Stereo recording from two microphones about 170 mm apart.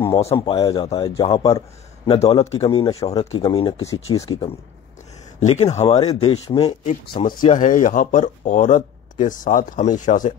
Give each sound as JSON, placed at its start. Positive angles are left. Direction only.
{"t": 0.1, "sound": "a man's voice", "side_deg": 40}
{"t": 0.4, "sound": "speech", "side_deg": 25}
{"t": 2.0, "sound": "speech", "side_deg": 35}
{"t": 5.4, "sound": "speech", "side_deg": 40}